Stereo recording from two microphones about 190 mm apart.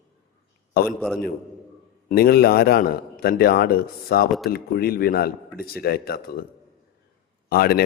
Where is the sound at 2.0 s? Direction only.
55° left (ahead or behind).